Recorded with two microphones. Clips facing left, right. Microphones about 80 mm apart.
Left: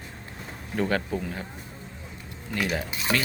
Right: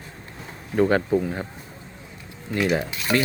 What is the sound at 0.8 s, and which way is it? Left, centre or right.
Speech, right.